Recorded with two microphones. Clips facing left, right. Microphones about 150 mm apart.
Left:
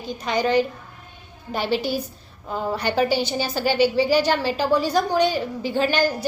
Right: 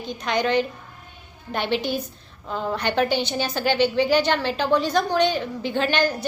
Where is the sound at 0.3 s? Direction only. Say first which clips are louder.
Left 2 dB; 5° left (ahead or behind).